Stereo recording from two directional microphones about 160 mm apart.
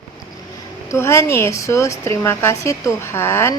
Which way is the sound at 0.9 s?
15° left (ahead or behind).